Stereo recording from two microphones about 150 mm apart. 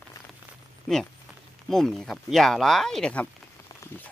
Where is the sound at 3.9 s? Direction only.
15° left (ahead or behind).